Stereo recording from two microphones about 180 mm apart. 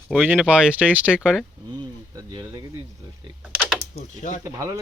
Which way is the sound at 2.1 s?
25° right (ahead or behind).